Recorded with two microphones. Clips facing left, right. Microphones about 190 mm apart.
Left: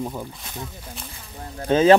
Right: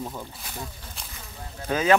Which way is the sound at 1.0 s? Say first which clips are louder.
Left 4 dB; 5° left (ahead or behind).